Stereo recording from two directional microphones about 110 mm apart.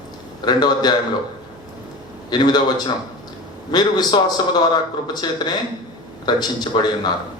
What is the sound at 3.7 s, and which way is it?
A man's voice, 40° left (ahead or behind).